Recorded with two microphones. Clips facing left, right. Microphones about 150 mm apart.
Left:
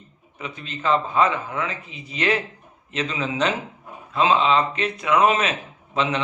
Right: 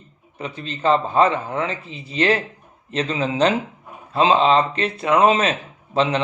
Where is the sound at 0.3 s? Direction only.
35° right (ahead or behind).